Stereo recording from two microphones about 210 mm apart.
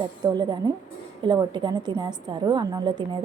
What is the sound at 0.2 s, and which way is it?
A woman's voice, 20° right (ahead or behind).